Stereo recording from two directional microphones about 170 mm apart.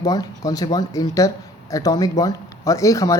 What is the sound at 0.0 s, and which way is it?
Speech, 20° left (ahead or behind).